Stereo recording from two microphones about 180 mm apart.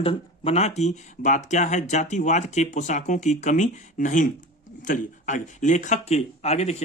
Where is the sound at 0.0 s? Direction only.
30° left (ahead or behind).